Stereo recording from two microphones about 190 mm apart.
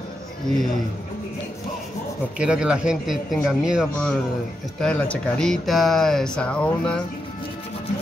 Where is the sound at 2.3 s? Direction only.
5° right (ahead or behind).